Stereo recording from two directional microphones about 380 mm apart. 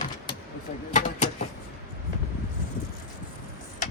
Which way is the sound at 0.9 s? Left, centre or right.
Centre.